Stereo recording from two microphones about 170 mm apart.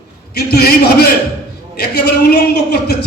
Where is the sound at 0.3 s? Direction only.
70° left (ahead or behind).